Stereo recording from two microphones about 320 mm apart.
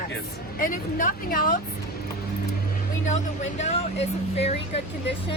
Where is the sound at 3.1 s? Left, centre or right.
Left.